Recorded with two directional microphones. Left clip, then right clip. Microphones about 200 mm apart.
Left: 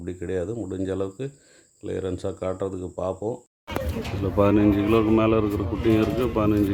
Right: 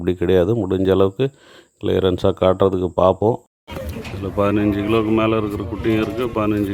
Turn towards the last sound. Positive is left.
turn(degrees=0)  # may be behind; listen again after turning